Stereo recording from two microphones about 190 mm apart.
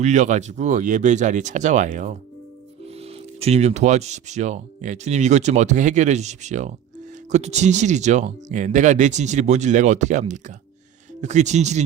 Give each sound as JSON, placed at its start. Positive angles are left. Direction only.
{"t": 0.0, "sound": "speech", "side_deg": -40}